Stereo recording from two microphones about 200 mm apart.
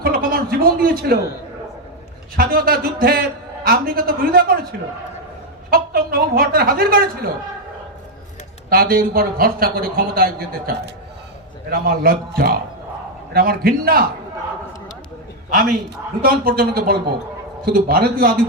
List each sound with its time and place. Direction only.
0.0 s a sound: 45° right (ahead or behind)
2.3 s a man's voice: 50° right (ahead or behind)
8.7 s a man's voice: 50° right (ahead or behind)
11.7 s a man's voice: 50° right (ahead or behind)
16.2 s a man's voice: 45° right (ahead or behind)